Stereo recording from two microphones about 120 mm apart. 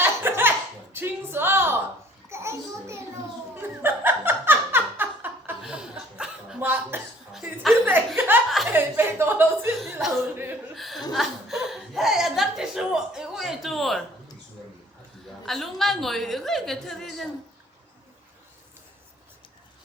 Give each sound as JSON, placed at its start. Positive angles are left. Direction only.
{"t": 0.0, "sound": "laughter", "side_deg": -20}
{"t": 0.9, "sound": "a sound", "side_deg": -20}
{"t": 3.5, "sound": "laughter", "side_deg": -15}
{"t": 5.6, "sound": "chuckle", "side_deg": -5}
{"t": 7.9, "sound": "a sound", "side_deg": -15}
{"t": 8.7, "sound": "chuckle", "side_deg": -20}
{"t": 9.7, "sound": "chuckle", "side_deg": 0}
{"t": 15.4, "sound": "a woman's voice", "side_deg": 0}